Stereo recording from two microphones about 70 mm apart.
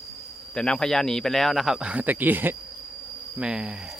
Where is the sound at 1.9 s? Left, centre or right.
Right.